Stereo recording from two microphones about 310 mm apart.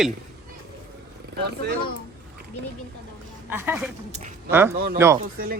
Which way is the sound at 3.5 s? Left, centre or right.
Centre.